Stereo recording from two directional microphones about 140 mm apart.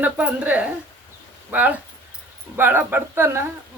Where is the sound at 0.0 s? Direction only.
10° right (ahead or behind).